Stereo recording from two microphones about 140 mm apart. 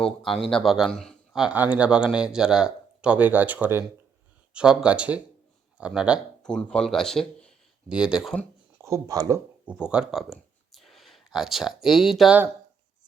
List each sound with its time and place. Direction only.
0.2 s speech: centre (ahead or behind)
6.4 s speech: 5° left (ahead or behind)
7.9 s speech: 5° right (ahead or behind)
8.8 s speech: 25° right (ahead or behind)
9.6 s speech: 5° right (ahead or behind)